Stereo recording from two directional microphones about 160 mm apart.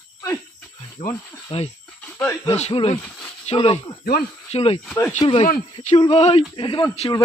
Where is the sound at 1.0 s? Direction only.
45° left (ahead or behind).